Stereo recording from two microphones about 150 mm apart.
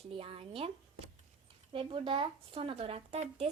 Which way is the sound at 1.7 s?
35° right (ahead or behind).